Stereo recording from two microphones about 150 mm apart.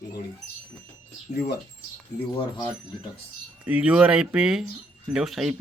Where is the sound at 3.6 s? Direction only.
10° right (ahead or behind).